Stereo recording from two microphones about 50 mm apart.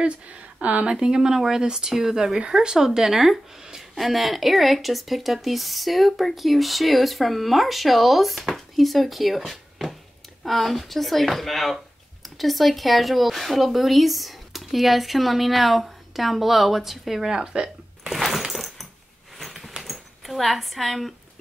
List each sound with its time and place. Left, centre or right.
0.0 s speech: right
0.9 s speech: centre
18.1 s coin: centre
19.3 s a sound: centre
19.7 s zipper: centre